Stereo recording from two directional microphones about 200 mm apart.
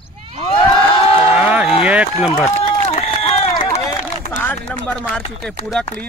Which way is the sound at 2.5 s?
30° left (ahead or behind).